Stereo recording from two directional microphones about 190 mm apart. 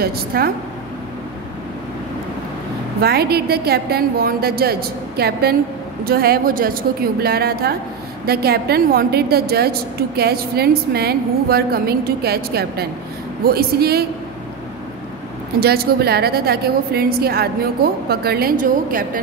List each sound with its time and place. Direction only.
0.0 s a woman's voice: 55° right (ahead or behind)
3.0 s a woman's voice: 55° right (ahead or behind)
15.6 s a woman's voice: 55° right (ahead or behind)